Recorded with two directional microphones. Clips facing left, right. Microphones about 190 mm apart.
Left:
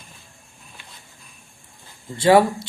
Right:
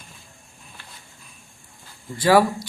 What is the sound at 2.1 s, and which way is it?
Speech, 25° left (ahead or behind).